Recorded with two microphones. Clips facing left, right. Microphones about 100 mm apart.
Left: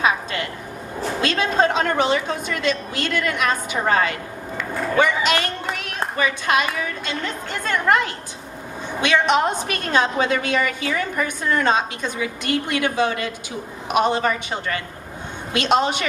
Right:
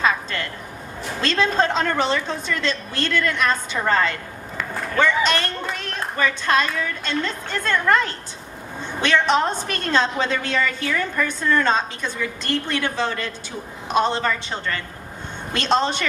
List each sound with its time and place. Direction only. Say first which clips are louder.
0.0 s a woman's voice: left 1 dB; 15° left (ahead or behind)